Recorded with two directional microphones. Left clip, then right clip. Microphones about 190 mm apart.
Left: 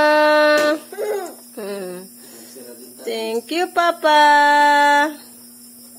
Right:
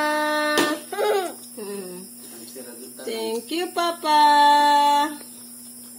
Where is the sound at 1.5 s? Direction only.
40° left (ahead or behind).